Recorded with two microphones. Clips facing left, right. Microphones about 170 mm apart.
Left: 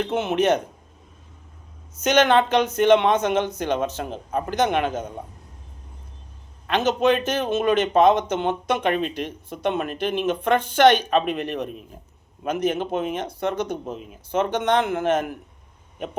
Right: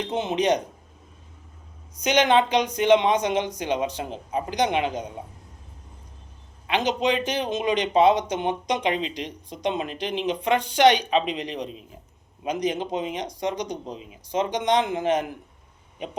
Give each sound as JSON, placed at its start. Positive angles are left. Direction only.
{"t": 0.0, "sound": "speech", "side_deg": -15}
{"t": 2.0, "sound": "speech", "side_deg": -15}
{"t": 6.7, "sound": "speech", "side_deg": -15}
{"t": 8.9, "sound": "speech", "side_deg": 55}
{"t": 9.1, "sound": "speech", "side_deg": -15}
{"t": 11.3, "sound": "speech", "side_deg": 55}
{"t": 12.5, "sound": "speech", "side_deg": -15}